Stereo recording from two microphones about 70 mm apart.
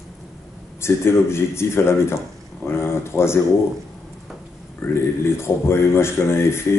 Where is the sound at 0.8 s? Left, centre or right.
Left.